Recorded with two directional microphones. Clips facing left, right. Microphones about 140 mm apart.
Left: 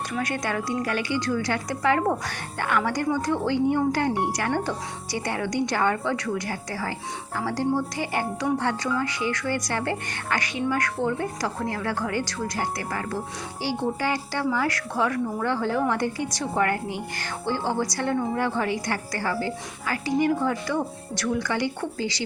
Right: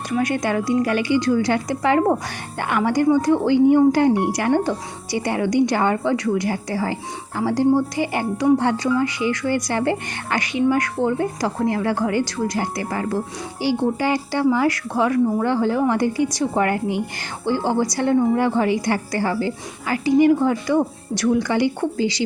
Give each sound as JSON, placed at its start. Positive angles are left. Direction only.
{"t": 0.2, "sound": "a woman's voice", "side_deg": -15}